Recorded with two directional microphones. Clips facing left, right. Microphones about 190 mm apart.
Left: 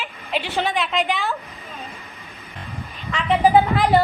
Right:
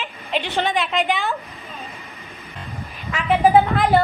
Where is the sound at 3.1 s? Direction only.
5° right (ahead or behind).